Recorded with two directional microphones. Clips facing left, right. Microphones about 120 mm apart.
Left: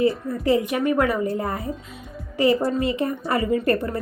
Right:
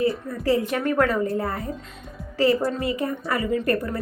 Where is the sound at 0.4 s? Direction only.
15° left (ahead or behind).